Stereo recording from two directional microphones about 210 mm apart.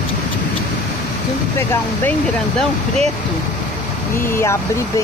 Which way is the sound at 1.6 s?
10° left (ahead or behind).